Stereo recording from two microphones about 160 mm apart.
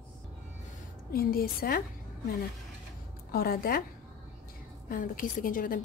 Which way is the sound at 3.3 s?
65° left (ahead or behind).